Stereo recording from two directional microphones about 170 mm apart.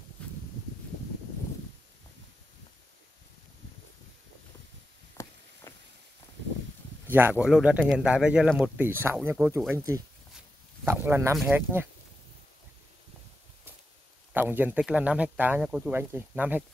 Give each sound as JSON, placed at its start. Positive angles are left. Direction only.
{"t": 5.1, "sound": "a sound", "side_deg": 20}
{"t": 7.1, "sound": "speech", "side_deg": -10}
{"t": 8.7, "sound": "speech", "side_deg": -10}
{"t": 10.9, "sound": "speech", "side_deg": -15}
{"t": 14.3, "sound": "speech", "side_deg": -10}